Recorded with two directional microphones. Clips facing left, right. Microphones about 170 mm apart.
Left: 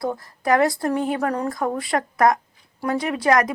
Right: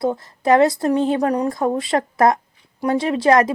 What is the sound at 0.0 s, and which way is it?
A woman's voice, 25° right (ahead or behind).